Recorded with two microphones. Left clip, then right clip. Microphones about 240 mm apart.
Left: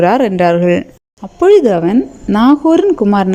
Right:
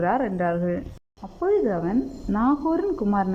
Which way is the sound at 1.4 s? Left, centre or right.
Left.